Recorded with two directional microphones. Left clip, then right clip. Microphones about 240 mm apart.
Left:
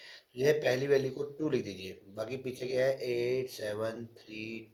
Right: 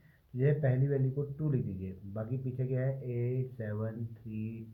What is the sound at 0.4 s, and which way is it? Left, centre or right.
Speech, left.